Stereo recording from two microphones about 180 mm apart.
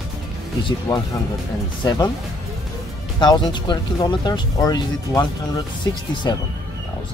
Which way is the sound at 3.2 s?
25° left (ahead or behind).